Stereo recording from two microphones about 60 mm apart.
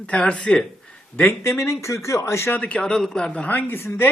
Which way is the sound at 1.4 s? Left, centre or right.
Left.